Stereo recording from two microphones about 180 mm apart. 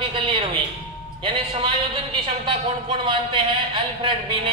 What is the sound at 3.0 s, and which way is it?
Speech, 30° right (ahead or behind).